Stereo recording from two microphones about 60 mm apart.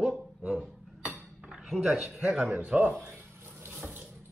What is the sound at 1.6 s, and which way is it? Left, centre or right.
Speech, centre.